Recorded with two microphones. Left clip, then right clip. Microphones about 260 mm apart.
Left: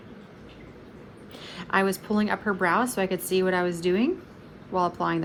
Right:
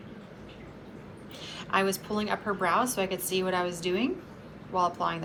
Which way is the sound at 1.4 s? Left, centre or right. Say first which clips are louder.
Left 3 dB; left.